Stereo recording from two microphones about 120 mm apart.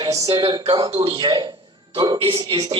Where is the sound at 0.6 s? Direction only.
50° right (ahead or behind).